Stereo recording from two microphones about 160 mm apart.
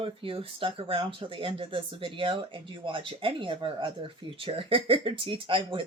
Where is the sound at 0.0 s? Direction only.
35° right (ahead or behind).